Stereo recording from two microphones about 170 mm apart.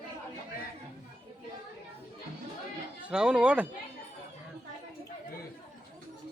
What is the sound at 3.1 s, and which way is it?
Speech, 5° right (ahead or behind).